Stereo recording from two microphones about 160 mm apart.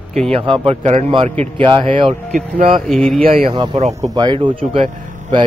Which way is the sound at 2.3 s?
60° right (ahead or behind).